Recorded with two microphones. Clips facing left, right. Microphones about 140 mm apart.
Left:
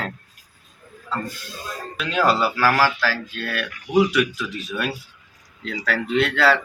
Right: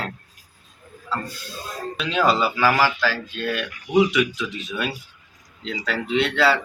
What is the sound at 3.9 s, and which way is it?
Speech, centre (ahead or behind).